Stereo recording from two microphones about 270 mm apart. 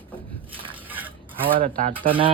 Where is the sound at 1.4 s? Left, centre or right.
Right.